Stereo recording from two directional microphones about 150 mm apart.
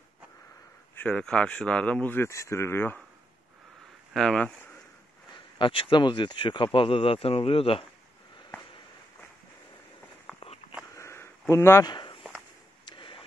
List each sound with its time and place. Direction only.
0.9 s speech: 10° left (ahead or behind)
4.1 s speech: 5° left (ahead or behind)
5.3 s speech: 35° left (ahead or behind)
10.3 s walk: 5° left (ahead or behind)
11.0 s a sound: 15° left (ahead or behind)
11.9 s walk: 30° left (ahead or behind)
12.8 s a sound: 35° left (ahead or behind)